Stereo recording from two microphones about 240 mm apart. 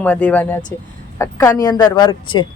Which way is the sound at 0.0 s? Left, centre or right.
Centre.